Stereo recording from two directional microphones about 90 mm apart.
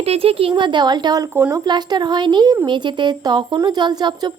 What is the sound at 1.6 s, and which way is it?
A woman's voice, 55° right (ahead or behind).